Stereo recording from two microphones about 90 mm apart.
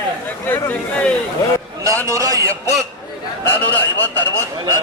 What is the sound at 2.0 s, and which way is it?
Speech, 40° right (ahead or behind).